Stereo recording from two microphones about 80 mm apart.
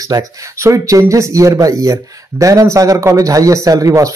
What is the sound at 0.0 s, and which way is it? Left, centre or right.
Speech, right.